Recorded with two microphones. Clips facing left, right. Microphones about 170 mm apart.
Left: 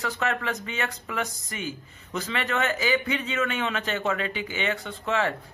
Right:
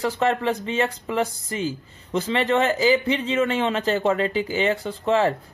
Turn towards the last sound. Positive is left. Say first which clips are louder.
# right 6 dB
turn(degrees=-35)  # may be behind; listen again after turning